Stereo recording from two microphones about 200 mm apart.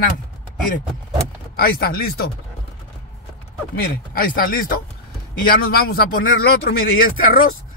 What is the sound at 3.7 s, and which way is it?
Speech, 45° left (ahead or behind).